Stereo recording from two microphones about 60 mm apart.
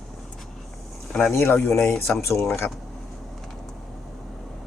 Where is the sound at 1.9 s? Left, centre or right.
Centre.